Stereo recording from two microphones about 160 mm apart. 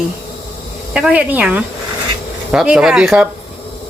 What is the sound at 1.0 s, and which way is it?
Speech, 5° right (ahead or behind).